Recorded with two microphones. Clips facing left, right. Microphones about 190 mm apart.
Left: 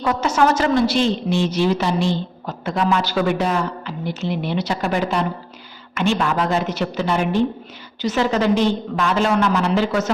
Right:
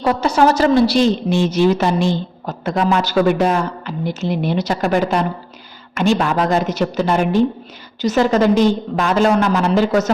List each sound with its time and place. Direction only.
0.0 s a woman's voice: 35° right (ahead or behind)